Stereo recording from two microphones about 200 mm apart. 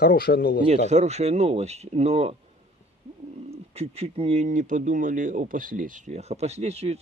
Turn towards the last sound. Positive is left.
turn(degrees=-30)  # may be behind; listen again after turning